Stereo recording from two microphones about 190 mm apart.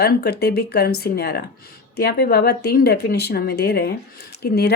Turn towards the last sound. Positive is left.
turn(degrees=55)  # may be behind; listen again after turning